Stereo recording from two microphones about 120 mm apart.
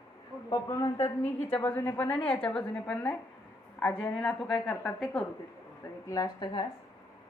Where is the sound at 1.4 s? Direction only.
15° left (ahead or behind).